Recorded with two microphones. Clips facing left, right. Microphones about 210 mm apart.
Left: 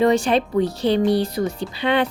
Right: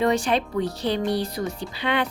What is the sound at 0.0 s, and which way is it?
Speech, 25° left (ahead or behind).